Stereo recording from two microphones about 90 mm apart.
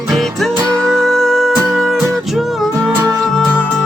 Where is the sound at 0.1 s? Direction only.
Centre (ahead or behind).